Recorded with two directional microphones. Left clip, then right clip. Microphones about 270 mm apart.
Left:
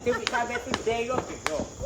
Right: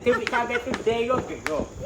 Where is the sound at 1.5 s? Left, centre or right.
Left.